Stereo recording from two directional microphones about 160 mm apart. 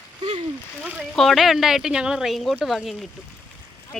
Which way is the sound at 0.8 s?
Centre (ahead or behind).